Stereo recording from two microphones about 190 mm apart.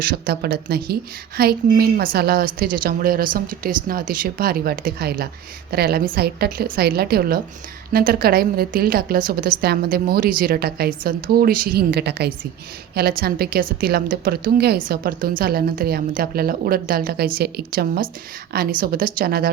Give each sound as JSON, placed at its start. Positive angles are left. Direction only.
{"t": 0.0, "sound": "a woman's voice", "side_deg": -50}